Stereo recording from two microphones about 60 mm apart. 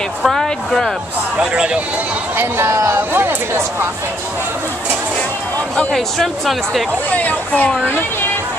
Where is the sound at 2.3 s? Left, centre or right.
Right.